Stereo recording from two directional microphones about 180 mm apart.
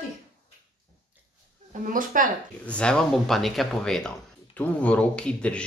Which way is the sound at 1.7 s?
50° right (ahead or behind).